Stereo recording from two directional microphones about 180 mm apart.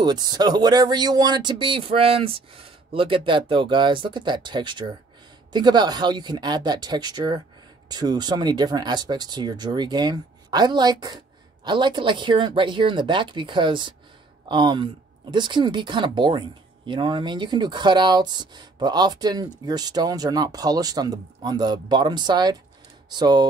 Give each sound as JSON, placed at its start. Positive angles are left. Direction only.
{"t": 0.0, "sound": "speech", "side_deg": -20}